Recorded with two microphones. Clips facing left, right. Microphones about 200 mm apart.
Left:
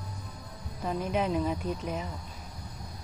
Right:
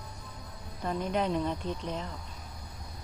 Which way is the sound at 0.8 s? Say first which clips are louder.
Left 1 dB; 5° left (ahead or behind).